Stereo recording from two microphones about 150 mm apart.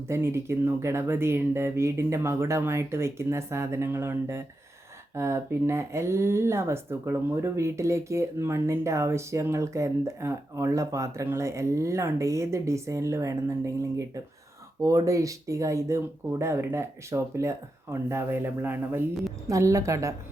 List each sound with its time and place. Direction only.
0.1 s speech: 15° right (ahead or behind)
14.8 s speech: 20° right (ahead or behind)